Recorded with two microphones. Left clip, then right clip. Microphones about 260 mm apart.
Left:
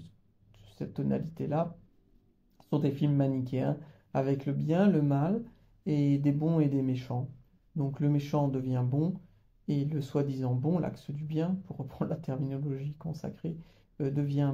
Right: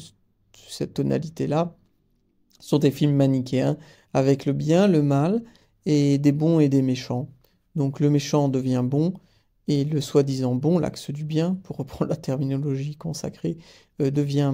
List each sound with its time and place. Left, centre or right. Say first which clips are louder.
0.5 s speech: right 12 dB; right